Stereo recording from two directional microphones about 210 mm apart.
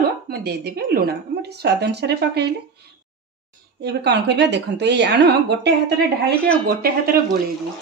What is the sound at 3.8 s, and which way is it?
Speech, 50° right (ahead or behind).